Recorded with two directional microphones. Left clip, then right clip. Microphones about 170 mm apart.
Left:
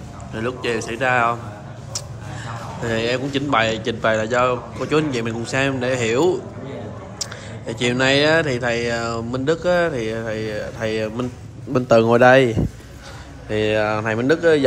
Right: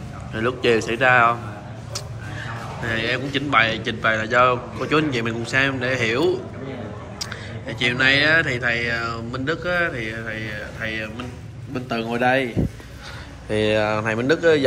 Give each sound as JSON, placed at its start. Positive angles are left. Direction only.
{"t": 0.3, "sound": "a man's voice", "side_deg": 10}
{"t": 13.5, "sound": "a man's voice", "side_deg": 10}